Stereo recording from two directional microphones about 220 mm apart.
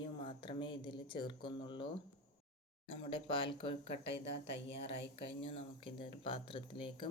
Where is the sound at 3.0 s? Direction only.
25° left (ahead or behind).